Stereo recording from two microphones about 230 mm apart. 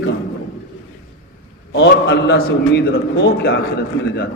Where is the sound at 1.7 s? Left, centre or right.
Left.